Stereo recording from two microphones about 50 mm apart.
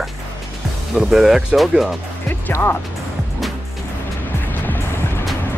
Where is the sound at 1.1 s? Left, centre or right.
Centre.